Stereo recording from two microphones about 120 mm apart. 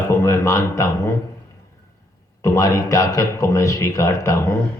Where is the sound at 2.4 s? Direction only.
25° left (ahead or behind).